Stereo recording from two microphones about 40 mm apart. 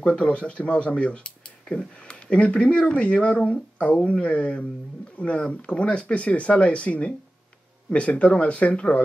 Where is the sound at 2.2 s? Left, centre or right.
Left.